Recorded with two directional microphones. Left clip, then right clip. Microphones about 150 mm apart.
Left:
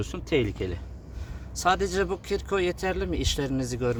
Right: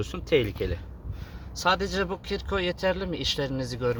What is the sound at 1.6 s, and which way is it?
Speech, 25° left (ahead or behind).